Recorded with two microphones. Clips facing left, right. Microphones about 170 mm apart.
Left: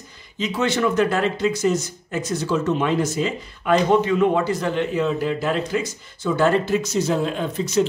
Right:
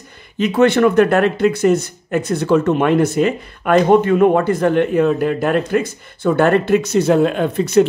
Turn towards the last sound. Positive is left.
turn(degrees=-60)  # may be behind; listen again after turning